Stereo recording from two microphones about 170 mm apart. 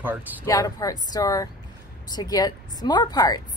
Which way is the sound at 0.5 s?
20° left (ahead or behind).